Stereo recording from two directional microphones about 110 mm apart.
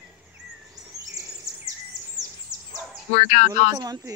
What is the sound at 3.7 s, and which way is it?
Speech, 35° right (ahead or behind).